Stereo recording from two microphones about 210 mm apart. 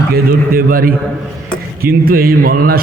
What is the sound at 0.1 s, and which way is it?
A man's voice, 45° right (ahead or behind).